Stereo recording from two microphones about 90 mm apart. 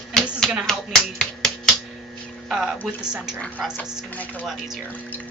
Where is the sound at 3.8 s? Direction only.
20° left (ahead or behind).